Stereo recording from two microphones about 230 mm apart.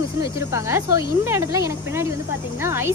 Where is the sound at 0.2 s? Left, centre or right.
Centre.